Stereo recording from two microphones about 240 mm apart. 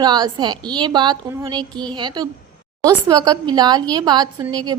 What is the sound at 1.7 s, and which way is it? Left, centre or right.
Speech, centre.